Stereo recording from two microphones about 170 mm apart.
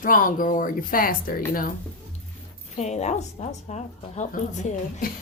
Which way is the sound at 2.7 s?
45° left (ahead or behind).